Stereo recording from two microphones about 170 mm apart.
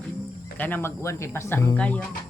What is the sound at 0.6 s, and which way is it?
Speech, 10° left (ahead or behind).